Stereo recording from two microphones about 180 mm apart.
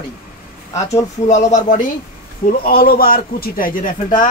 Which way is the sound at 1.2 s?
40° left (ahead or behind).